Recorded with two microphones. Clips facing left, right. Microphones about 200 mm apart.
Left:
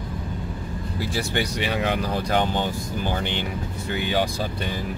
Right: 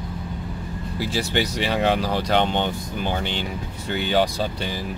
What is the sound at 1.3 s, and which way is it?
Speech, 35° right (ahead or behind).